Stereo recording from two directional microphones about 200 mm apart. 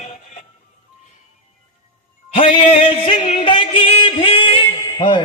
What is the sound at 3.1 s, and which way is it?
Music, 30° left (ahead or behind).